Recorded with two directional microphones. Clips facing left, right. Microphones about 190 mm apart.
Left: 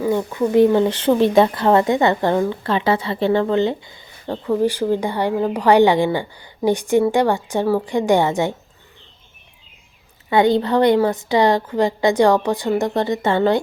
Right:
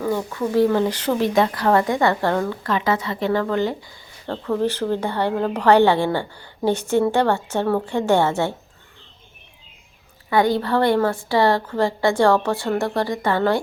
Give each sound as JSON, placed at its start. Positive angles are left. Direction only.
{"t": 0.0, "sound": "speech", "side_deg": 20}
{"t": 2.6, "sound": "speech", "side_deg": 30}
{"t": 4.4, "sound": "a woman's voice", "side_deg": 10}
{"t": 10.2, "sound": "a woman's voice", "side_deg": 20}